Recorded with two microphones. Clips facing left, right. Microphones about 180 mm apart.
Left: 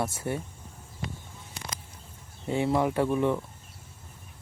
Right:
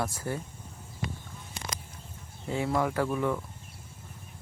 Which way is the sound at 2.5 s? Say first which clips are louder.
Left 3 dB; 25° left (ahead or behind).